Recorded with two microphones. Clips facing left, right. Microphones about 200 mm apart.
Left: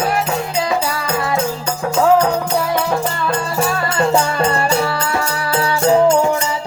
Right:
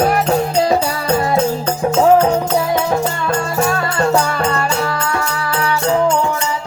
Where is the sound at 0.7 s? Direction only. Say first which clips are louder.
Right 4 dB; 30° right (ahead or behind).